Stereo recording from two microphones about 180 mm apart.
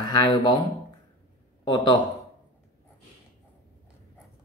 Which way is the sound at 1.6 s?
25° left (ahead or behind).